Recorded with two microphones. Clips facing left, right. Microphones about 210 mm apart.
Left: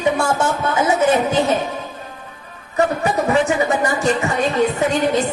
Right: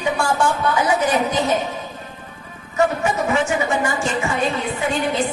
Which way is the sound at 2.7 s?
35° left (ahead or behind).